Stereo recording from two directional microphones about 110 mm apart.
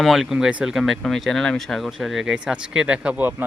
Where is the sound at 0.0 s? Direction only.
5° right (ahead or behind).